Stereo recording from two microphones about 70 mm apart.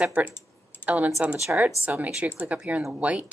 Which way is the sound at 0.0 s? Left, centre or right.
Centre.